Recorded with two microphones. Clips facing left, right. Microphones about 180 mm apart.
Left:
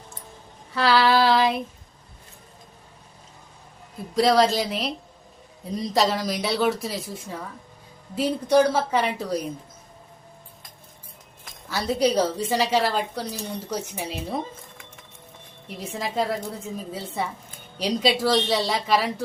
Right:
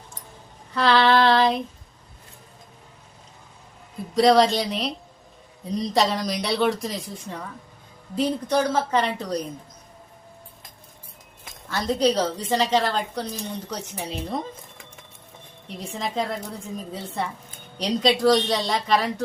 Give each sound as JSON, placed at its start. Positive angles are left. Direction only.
{"t": 0.7, "sound": "speech", "side_deg": 5}
{"t": 4.1, "sound": "a woman's voice", "side_deg": 0}
{"t": 11.7, "sound": "a woman's voice", "side_deg": 5}
{"t": 15.8, "sound": "speech", "side_deg": 5}